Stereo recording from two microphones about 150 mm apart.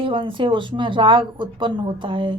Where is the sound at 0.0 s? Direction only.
35° right (ahead or behind).